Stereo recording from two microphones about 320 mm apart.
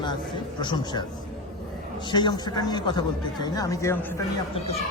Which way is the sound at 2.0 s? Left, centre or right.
Centre.